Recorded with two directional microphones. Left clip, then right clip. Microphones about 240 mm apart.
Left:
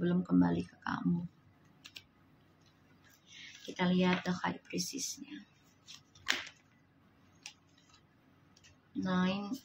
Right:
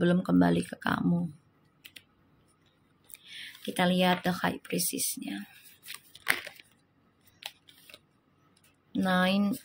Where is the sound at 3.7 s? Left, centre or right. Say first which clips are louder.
Right 7 dB; right.